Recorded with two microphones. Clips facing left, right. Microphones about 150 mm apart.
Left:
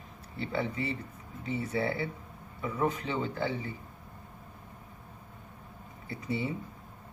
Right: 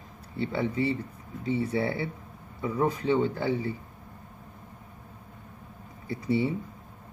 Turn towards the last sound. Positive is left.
turn(degrees=-30)  # may be behind; listen again after turning